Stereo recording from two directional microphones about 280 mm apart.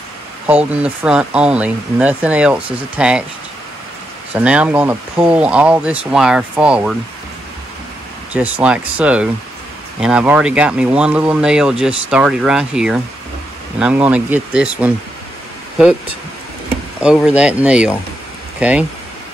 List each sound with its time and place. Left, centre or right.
0.5 s speech: centre
4.3 s speech: centre
8.3 s speech: centre
17.0 s speech: centre